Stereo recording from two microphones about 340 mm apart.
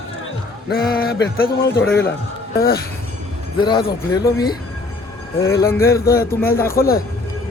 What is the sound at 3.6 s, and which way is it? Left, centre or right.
Speech, centre.